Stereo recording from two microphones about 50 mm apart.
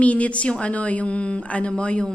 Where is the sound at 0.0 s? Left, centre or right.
Left.